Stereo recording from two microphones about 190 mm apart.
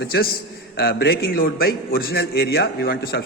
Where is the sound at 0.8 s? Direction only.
55° left (ahead or behind).